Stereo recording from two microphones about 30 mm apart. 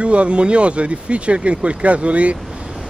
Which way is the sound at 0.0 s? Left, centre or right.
Right.